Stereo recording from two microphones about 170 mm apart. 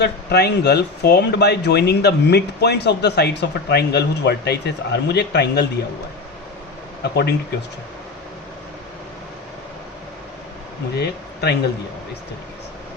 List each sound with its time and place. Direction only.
0.0 s speech: 70° left (ahead or behind)
7.0 s speech: 80° left
10.9 s speech: 75° left (ahead or behind)